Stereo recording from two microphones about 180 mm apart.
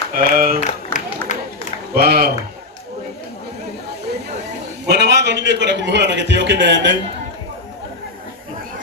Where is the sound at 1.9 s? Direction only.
60° right (ahead or behind).